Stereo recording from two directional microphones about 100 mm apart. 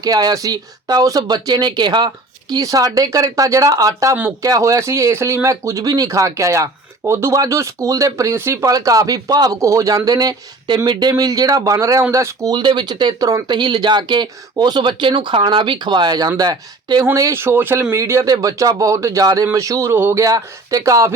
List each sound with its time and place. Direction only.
0.0 s speech: 40° right (ahead or behind)
10.7 s speech: 50° right (ahead or behind)
17.2 s speech: 30° right (ahead or behind)